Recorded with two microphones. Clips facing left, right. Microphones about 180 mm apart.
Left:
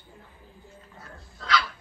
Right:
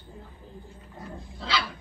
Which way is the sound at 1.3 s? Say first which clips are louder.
Left 3 dB; 30° right (ahead or behind).